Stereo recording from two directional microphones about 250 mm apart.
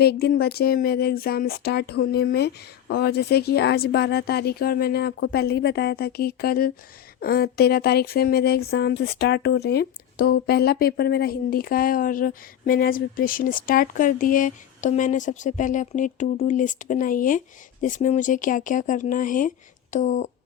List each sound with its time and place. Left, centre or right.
0.0 s speech: left